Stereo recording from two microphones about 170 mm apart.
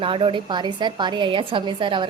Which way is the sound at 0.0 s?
30° right (ahead or behind).